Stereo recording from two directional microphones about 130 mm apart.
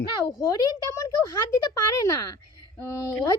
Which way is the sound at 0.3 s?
30° left (ahead or behind).